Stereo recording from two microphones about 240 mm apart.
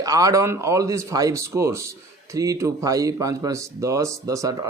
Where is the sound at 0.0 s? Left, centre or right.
Centre.